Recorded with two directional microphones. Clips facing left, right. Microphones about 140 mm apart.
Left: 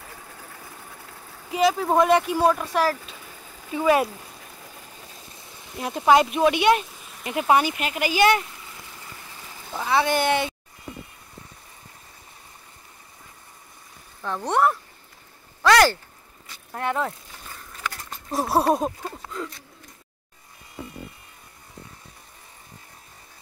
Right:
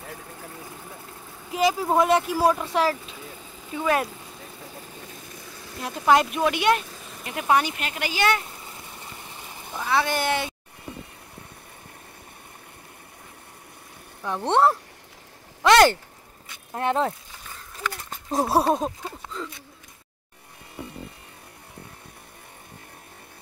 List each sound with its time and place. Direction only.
1.5 s speech: centre (ahead or behind)
2.5 s speech: 20° right (ahead or behind)
3.7 s speech: 5° left (ahead or behind)
5.8 s speech: 5° left (ahead or behind)
8.5 s a sound: 30° right (ahead or behind)
9.8 s speech: 5° left (ahead or behind)
14.2 s speech: 20° right (ahead or behind)
15.6 s a sound: 20° right (ahead or behind)
16.7 s speech: 25° right (ahead or behind)
18.5 s speech: centre (ahead or behind)